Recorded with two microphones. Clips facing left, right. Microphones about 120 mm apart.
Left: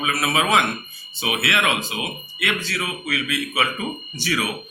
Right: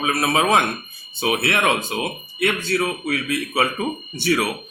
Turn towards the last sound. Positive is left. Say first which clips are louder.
# right 5 dB
turn(degrees=-55)  # may be behind; listen again after turning